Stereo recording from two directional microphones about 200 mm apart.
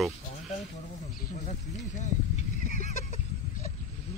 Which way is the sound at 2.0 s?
35° left (ahead or behind).